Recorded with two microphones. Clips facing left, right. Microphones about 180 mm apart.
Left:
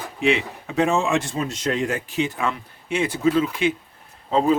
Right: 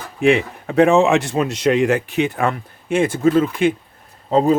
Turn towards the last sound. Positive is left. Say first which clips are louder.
# right 4 dB
turn(degrees=-40)  # may be behind; listen again after turning